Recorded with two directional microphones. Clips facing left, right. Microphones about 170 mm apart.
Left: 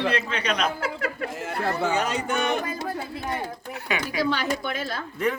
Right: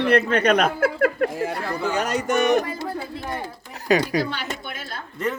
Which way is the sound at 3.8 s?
40° right (ahead or behind).